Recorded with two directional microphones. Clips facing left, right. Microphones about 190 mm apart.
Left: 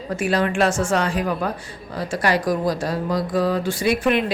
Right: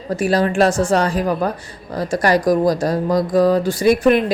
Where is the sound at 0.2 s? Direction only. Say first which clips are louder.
Right 4 dB; 35° right (ahead or behind).